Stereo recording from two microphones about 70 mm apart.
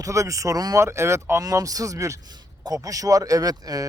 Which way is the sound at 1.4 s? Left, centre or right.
Right.